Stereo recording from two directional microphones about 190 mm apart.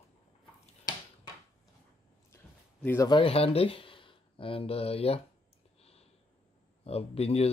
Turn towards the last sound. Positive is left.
turn(degrees=30)  # may be behind; listen again after turning